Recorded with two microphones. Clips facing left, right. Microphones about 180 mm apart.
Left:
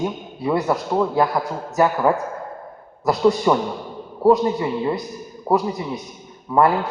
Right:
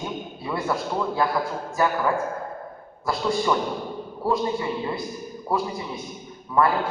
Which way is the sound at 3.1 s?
45° left (ahead or behind).